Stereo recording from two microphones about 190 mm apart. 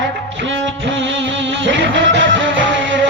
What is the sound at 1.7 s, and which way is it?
Music, 75° right (ahead or behind).